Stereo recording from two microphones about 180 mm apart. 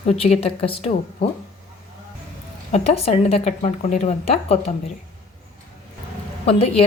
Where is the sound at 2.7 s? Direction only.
35° left (ahead or behind).